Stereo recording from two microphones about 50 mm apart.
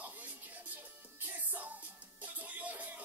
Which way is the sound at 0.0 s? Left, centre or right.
Right.